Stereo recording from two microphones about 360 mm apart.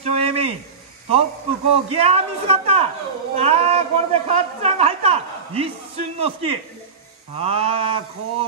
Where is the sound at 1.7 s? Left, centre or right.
Centre.